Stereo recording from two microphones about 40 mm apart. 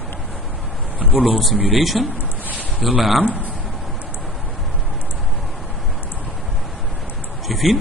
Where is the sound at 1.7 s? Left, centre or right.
Centre.